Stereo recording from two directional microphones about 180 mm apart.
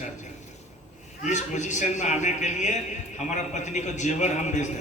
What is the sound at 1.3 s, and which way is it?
A man's voice, 40° left (ahead or behind).